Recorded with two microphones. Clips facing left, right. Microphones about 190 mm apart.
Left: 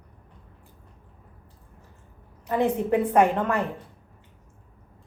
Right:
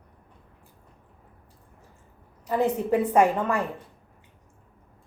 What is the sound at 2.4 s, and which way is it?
A woman's voice, 5° right (ahead or behind).